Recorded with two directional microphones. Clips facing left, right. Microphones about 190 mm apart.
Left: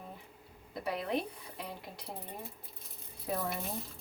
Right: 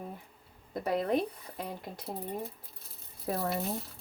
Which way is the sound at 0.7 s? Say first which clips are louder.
Right 5 dB; 45° right (ahead or behind).